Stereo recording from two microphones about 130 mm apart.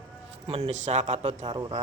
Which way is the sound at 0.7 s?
65° right (ahead or behind).